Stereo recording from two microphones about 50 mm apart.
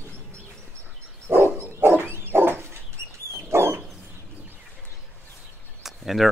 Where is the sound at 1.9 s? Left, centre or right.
Right.